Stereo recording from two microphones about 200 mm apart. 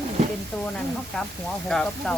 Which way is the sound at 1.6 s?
Centre (ahead or behind).